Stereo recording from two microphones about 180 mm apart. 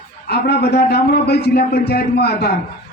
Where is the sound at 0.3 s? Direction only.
65° left (ahead or behind).